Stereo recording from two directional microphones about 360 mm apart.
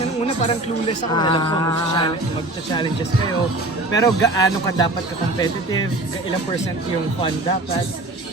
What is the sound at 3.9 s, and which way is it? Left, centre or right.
A man's voice, centre.